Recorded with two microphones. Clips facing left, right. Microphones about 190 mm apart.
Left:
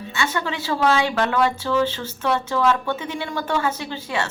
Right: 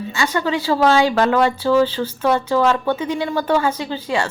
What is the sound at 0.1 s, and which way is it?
A woman's voice, 35° right (ahead or behind).